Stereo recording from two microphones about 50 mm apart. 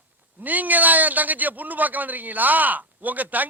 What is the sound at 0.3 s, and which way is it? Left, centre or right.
A man's voice, right.